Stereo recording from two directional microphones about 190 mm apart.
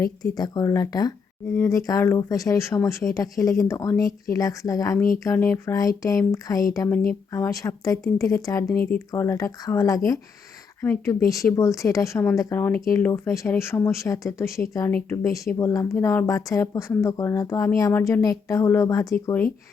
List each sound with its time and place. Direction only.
0.0 s speech: 20° left (ahead or behind)